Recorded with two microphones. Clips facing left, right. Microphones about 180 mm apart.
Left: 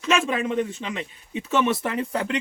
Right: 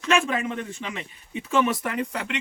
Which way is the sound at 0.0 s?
15° left (ahead or behind).